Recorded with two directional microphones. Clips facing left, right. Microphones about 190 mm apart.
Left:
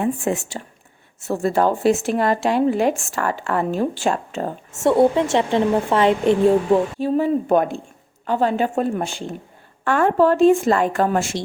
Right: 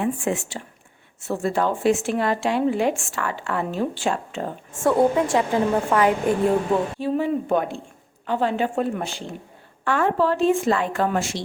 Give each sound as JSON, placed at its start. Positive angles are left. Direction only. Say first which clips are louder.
{"t": 0.0, "sound": "speech", "louder": "left 2 dB", "side_deg": 40}
{"t": 4.7, "sound": "a woman's voice", "louder": "left 3 dB", "side_deg": 25}
{"t": 7.0, "sound": "speech", "louder": "left 4 dB", "side_deg": 45}